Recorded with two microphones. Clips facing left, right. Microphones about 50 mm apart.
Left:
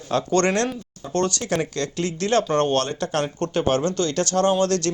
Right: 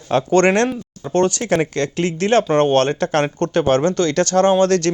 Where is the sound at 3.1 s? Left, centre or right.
Right.